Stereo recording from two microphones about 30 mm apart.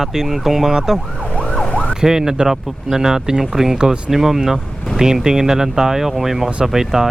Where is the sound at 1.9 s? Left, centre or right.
Centre.